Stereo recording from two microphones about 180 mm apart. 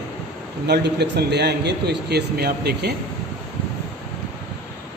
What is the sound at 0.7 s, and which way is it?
A man's voice, 70° right (ahead or behind).